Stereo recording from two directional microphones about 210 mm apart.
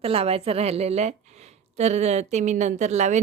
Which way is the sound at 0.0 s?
30° right (ahead or behind).